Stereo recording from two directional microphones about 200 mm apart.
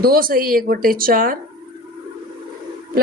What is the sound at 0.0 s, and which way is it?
A woman's voice, 45° right (ahead or behind).